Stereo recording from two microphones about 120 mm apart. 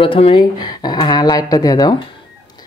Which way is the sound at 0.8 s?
35° left (ahead or behind).